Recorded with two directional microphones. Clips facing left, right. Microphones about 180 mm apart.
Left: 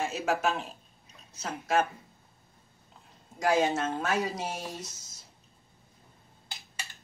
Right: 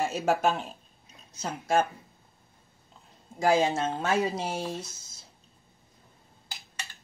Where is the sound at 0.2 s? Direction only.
30° right (ahead or behind).